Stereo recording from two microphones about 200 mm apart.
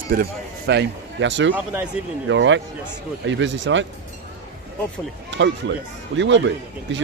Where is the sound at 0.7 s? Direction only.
60° right (ahead or behind).